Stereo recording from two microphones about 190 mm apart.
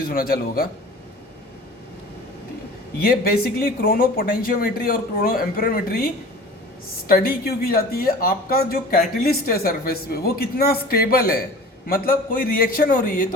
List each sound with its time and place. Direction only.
0.1 s speech: 50° left (ahead or behind)
3.0 s speech: 55° left (ahead or behind)
7.1 s speech: 55° left (ahead or behind)